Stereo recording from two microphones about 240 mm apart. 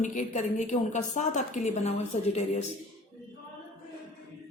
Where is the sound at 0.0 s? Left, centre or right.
Left.